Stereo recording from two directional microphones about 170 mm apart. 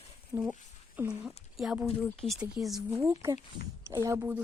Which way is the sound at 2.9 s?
15° right (ahead or behind).